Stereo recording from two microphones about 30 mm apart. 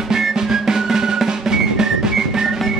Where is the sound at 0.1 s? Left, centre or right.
Centre.